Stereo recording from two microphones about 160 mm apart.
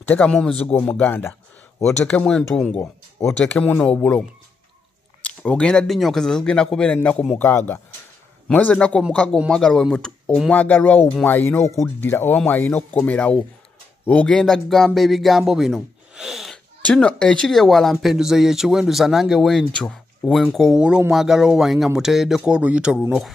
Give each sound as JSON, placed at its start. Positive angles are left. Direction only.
{"t": 0.1, "sound": "speech", "side_deg": 5}
{"t": 2.8, "sound": "speech", "side_deg": 15}
{"t": 3.3, "sound": "speech", "side_deg": 5}